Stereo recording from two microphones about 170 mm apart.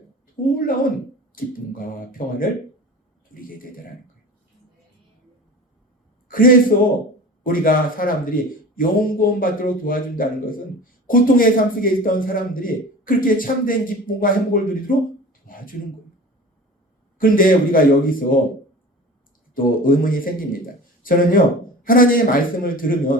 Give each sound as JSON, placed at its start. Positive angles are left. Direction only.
{"t": 0.4, "sound": "a woman's voice", "side_deg": 30}
{"t": 1.7, "sound": "a man's voice", "side_deg": 55}
{"t": 6.2, "sound": "a sound", "side_deg": 55}
{"t": 6.7, "sound": "a man's voice", "side_deg": 60}
{"t": 15.4, "sound": "a sound", "side_deg": 55}
{"t": 17.2, "sound": "a man's voice", "side_deg": 55}
{"t": 19.5, "sound": "a man's voice", "side_deg": 55}